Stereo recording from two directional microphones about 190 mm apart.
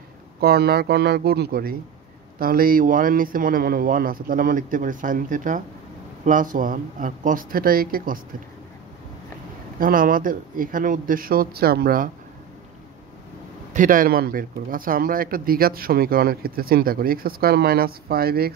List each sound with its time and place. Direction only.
0.4 s a man's voice: 55° right (ahead or behind)
9.8 s speech: 45° right (ahead or behind)
13.7 s speech: 45° right (ahead or behind)